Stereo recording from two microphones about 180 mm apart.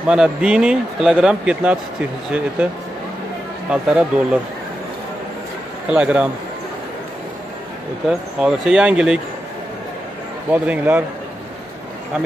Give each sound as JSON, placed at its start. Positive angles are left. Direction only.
{"t": 0.0, "sound": "speech", "side_deg": -5}
{"t": 3.7, "sound": "speech", "side_deg": -5}
{"t": 5.9, "sound": "a man's voice", "side_deg": -5}
{"t": 8.1, "sound": "speech", "side_deg": -5}
{"t": 10.5, "sound": "a man's voice", "side_deg": -10}